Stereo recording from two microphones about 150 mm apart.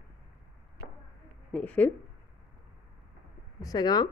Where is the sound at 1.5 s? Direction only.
10° left (ahead or behind).